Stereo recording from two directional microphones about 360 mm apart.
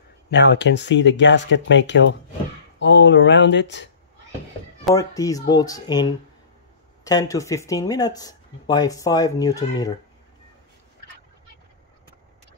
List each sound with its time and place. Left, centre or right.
0.3 s speech: left
4.8 s speech: centre
7.1 s speech: centre